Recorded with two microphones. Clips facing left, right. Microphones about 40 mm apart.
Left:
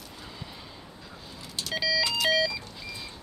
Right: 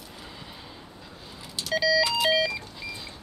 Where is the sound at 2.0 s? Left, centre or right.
Centre.